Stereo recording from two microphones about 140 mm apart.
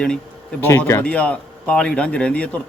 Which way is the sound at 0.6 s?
15° left (ahead or behind).